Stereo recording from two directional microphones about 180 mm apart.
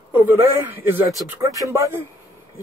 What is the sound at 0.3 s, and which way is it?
Speech, 10° right (ahead or behind).